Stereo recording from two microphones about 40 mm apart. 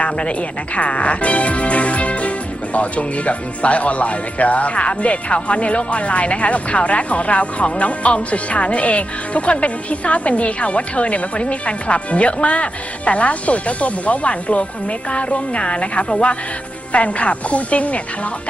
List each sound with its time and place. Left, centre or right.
0.0 s speech: left